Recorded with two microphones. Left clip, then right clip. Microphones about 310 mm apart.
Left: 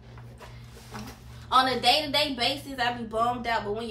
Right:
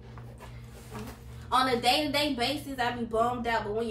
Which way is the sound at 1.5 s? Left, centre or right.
Centre.